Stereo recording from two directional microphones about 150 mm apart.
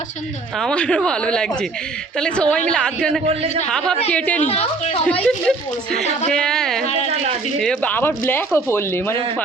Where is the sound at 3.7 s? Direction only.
5° left (ahead or behind).